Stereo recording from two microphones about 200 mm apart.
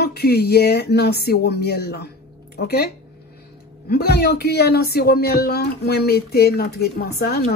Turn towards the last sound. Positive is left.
turn(degrees=50)  # may be behind; listen again after turning